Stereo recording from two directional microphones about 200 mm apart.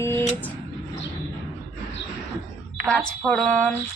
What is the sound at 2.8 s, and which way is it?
Speech, 5° left (ahead or behind).